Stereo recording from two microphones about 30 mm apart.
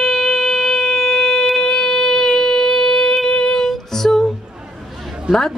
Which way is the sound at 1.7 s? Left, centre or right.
Centre.